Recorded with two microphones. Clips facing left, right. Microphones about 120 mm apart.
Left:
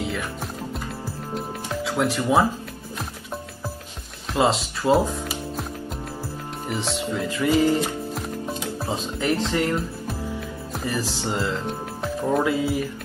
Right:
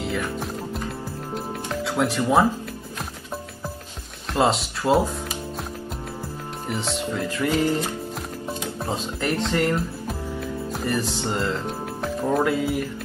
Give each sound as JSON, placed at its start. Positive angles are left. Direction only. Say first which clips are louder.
{"t": 0.0, "sound": "music", "louder": "right 2 dB", "side_deg": 0}
{"t": 4.3, "sound": "speech", "louder": "even", "side_deg": 0}
{"t": 6.7, "sound": "speech", "louder": "even", "side_deg": 0}
{"t": 7.3, "sound": "speech", "louder": "left 3 dB", "side_deg": 10}
{"t": 8.1, "sound": "music", "louder": "left 2 dB", "side_deg": 0}
{"t": 8.7, "sound": "speech", "louder": "even", "side_deg": 5}